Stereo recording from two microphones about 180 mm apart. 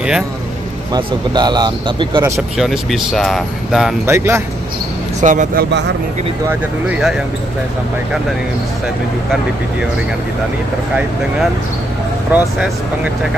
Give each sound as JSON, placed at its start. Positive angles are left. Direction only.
{"t": 0.9, "sound": "speech", "side_deg": -25}
{"t": 2.5, "sound": "speech", "side_deg": 0}
{"t": 4.0, "sound": "speech", "side_deg": -15}
{"t": 5.2, "sound": "speech", "side_deg": -45}
{"t": 6.9, "sound": "speech", "side_deg": -5}
{"t": 12.3, "sound": "speech", "side_deg": -5}